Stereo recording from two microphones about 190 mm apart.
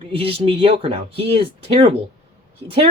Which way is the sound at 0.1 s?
30° right (ahead or behind).